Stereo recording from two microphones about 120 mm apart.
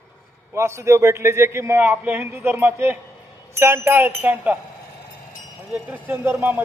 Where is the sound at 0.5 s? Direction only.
25° right (ahead or behind).